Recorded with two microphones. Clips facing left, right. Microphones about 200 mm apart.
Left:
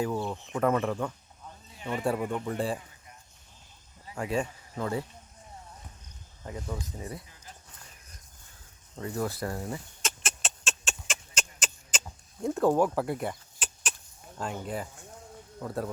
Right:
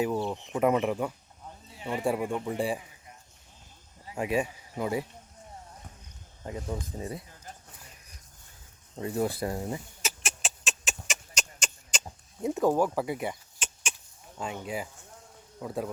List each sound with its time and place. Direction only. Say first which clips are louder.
0.0 s speech: right 2 dB; 15° right (ahead or behind)
4.0 s speech: right 2 dB; 20° right (ahead or behind)
6.4 s speech: right 2 dB; 25° right (ahead or behind)
9.0 s speech: right 3 dB; 20° right (ahead or behind)
10.0 s a sound: even; 5° right (ahead or behind)
14.3 s speech: even; centre (ahead or behind)